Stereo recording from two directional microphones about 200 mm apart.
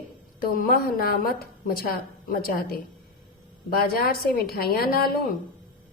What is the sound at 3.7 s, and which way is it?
A woman's voice, 50° left (ahead or behind).